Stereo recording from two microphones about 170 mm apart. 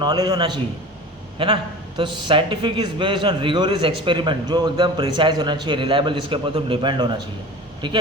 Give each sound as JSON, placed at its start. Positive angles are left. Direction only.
{"t": 0.0, "sound": "a man's voice", "side_deg": -25}
{"t": 2.0, "sound": "a man's voice", "side_deg": -30}